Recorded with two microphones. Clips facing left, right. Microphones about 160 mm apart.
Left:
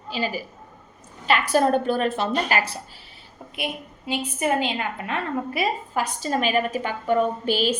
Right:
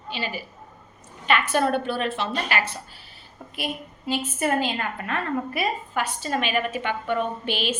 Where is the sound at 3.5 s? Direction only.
15° left (ahead or behind).